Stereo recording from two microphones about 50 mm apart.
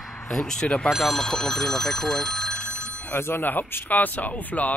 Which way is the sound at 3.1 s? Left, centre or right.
Left.